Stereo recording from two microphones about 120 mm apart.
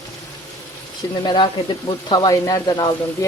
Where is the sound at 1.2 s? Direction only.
35° left (ahead or behind).